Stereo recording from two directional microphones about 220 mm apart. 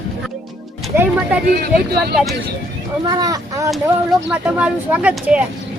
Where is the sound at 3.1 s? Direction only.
15° right (ahead or behind).